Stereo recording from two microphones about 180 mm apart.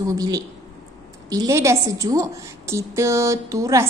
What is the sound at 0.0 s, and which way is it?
A woman's voice, 20° right (ahead or behind).